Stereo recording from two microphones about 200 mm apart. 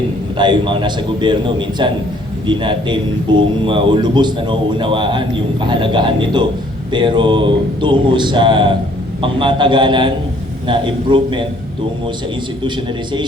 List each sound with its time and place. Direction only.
0.3 s a man's voice: 25° right (ahead or behind)